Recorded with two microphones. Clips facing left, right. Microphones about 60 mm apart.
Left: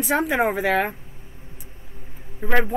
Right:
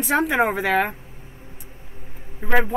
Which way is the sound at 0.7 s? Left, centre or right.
Centre.